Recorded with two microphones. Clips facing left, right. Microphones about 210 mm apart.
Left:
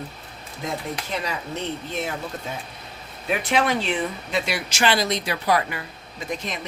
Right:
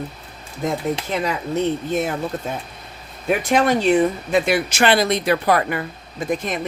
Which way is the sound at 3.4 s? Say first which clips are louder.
Right 5 dB; 45° right (ahead or behind).